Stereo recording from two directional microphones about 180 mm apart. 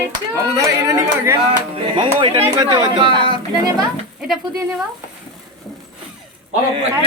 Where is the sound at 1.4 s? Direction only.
30° right (ahead or behind).